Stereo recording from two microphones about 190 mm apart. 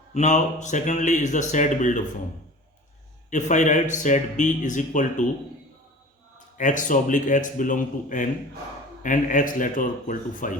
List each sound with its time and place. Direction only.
0.1 s speech: 40° left (ahead or behind)
3.2 s speech: 40° left (ahead or behind)
6.6 s a man's voice: 40° left (ahead or behind)